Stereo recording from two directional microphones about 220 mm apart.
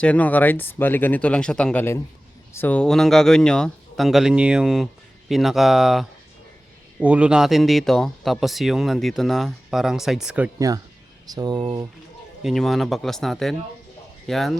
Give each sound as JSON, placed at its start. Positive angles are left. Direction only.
{"t": 0.0, "sound": "speech", "side_deg": 5}
{"t": 12.4, "sound": "speech", "side_deg": 0}